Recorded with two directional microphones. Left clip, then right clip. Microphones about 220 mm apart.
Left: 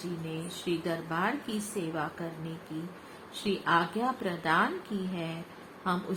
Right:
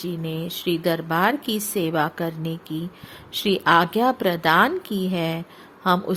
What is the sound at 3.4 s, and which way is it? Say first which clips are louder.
Speech: right 10 dB; 45° right (ahead or behind).